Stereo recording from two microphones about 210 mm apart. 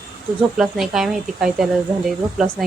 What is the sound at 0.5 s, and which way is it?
Speech, centre (ahead or behind).